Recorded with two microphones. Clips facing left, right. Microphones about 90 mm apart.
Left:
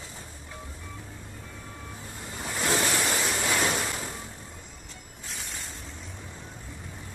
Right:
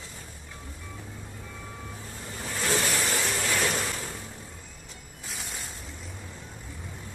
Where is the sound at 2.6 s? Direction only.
20° left (ahead or behind).